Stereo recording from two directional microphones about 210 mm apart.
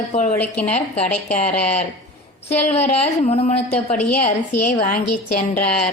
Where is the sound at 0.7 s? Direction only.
30° left (ahead or behind).